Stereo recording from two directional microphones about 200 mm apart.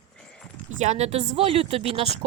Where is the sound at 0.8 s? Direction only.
35° right (ahead or behind).